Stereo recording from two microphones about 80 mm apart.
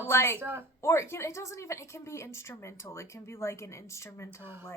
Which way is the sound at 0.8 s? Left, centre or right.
Left.